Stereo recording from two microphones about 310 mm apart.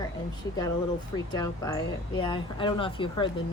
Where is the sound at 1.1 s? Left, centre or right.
Centre.